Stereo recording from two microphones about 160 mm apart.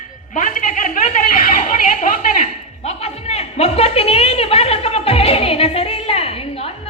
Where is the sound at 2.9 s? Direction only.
40° left (ahead or behind).